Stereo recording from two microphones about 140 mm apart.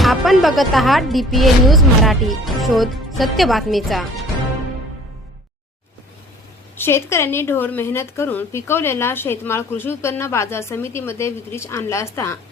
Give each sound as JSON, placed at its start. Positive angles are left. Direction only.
{"t": 0.0, "sound": "a woman's voice", "side_deg": 0}
{"t": 6.7, "sound": "speech", "side_deg": 15}